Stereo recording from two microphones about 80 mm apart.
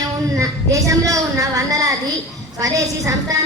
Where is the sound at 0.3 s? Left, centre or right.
Right.